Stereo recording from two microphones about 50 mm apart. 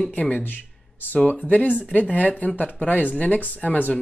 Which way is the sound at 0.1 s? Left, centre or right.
Left.